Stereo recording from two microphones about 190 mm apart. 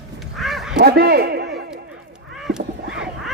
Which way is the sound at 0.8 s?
55° right (ahead or behind).